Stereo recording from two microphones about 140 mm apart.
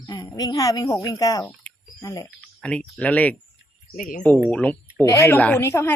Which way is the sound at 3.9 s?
70° left (ahead or behind).